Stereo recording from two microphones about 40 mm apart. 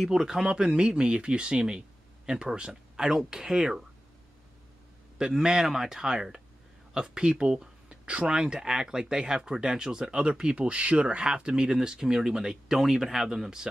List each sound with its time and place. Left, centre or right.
0.0 s speech: centre
0.5 s speech: right
2.7 s speech: centre
5.2 s speech: centre